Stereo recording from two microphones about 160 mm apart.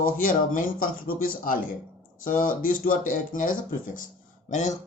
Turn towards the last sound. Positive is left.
turn(degrees=50)  # may be behind; listen again after turning